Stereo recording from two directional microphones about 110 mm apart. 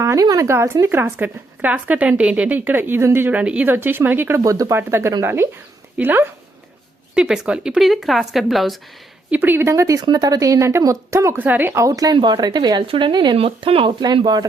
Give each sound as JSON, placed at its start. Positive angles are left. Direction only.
{"t": 0.0, "sound": "a woman's voice", "side_deg": -30}
{"t": 4.4, "sound": "a woman's voice", "side_deg": -30}
{"t": 7.1, "sound": "speech", "side_deg": -5}
{"t": 9.3, "sound": "a woman's voice", "side_deg": -15}
{"t": 12.1, "sound": "speech", "side_deg": -45}
{"t": 13.3, "sound": "speech", "side_deg": -60}